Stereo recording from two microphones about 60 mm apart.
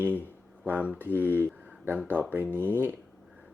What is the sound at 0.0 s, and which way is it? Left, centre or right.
Speech, right.